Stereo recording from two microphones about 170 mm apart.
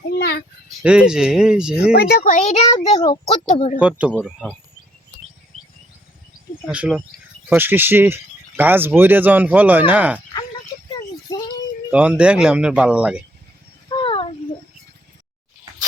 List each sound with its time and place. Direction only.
0.2 s a sound: 70° left (ahead or behind)
0.8 s speech: 5° right (ahead or behind)
1.9 s speech: 65° left (ahead or behind)
2.3 s a child's voice: 40° left (ahead or behind)
3.8 s speech: 5° right (ahead or behind)
4.1 s speech: 5° left (ahead or behind)
6.7 s speech: 5° right (ahead or behind)
11.3 s child singing: 25° left (ahead or behind)
11.9 s speech: 10° right (ahead or behind)
13.9 s a sound: 30° left (ahead or behind)